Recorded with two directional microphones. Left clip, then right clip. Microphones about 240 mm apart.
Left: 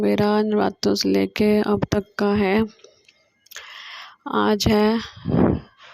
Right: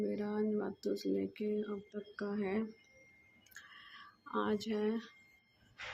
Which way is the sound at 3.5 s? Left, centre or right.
Left.